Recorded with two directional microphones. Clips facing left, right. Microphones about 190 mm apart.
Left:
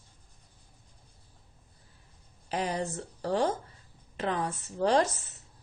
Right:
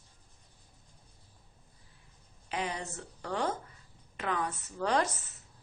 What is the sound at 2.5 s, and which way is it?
Speech, 40° left (ahead or behind).